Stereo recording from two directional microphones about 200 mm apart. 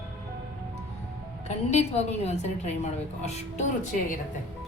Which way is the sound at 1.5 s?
35° left (ahead or behind).